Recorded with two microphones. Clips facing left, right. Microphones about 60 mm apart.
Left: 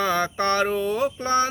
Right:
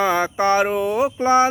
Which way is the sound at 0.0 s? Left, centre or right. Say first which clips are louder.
Right 4 dB; centre.